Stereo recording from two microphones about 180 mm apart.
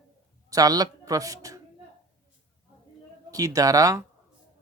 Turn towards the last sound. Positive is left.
turn(degrees=-20)  # may be behind; listen again after turning